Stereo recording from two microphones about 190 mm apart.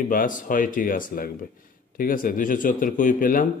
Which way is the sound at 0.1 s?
45° left (ahead or behind).